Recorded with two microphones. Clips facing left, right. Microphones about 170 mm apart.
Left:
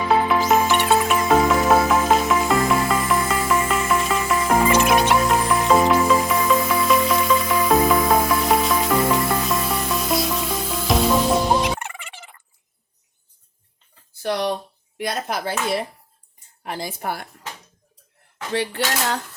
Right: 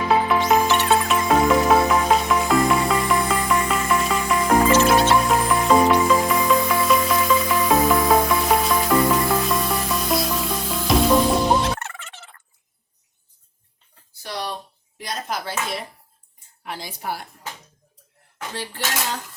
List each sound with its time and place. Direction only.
0.1 s music: centre (ahead or behind)
4.7 s music: 15° left (ahead or behind)
5.1 s music: centre (ahead or behind)
11.6 s turkey: 15° left (ahead or behind)
14.2 s a sound: 65° left (ahead or behind)
16.6 s a woman's voice: 50° left (ahead or behind)
18.5 s speech: 65° left (ahead or behind)